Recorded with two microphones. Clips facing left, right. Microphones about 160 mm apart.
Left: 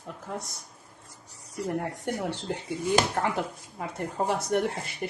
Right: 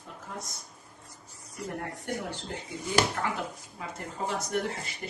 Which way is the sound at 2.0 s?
70° left (ahead or behind).